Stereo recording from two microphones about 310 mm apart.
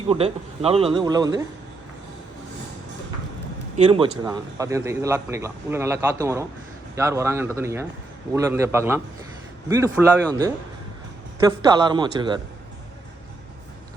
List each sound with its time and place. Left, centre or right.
0.1 s a man's voice: centre
3.8 s a man's voice: centre
11.3 s a man's voice: centre